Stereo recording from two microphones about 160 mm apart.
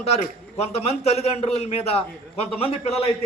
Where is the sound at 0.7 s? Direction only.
40° left (ahead or behind).